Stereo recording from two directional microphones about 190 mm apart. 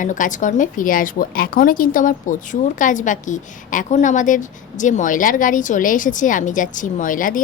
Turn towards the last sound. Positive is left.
turn(degrees=45)  # may be behind; listen again after turning